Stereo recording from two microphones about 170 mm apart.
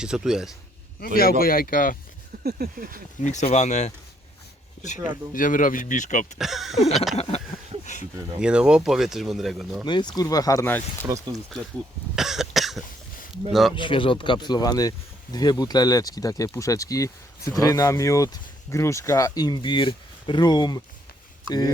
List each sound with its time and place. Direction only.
0.0 s speech: 5° right (ahead or behind)
1.0 s speech: 60° left (ahead or behind)
2.4 s a sound: 65° right (ahead or behind)
3.2 s speech: 45° left (ahead or behind)
5.3 s speech: 50° left (ahead or behind)
6.4 s speech: centre (ahead or behind)
7.2 s a sound: 40° left (ahead or behind)
8.4 s speech: 5° right (ahead or behind)
9.8 s speech: 25° left (ahead or behind)
11.0 s speech: 20° right (ahead or behind)
12.1 s cough: centre (ahead or behind)
13.5 s speech: centre (ahead or behind)
13.7 s speech: 30° left (ahead or behind)